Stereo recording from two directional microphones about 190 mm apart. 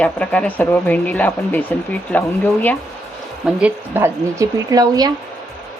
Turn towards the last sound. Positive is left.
turn(degrees=-20)  # may be behind; listen again after turning